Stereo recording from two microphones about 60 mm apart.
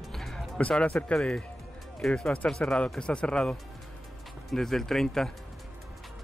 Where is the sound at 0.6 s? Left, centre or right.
Left.